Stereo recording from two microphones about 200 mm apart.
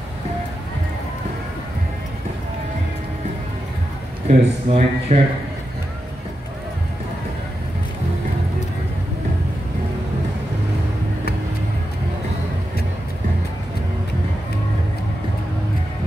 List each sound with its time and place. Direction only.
4.3 s speech: 30° right (ahead or behind)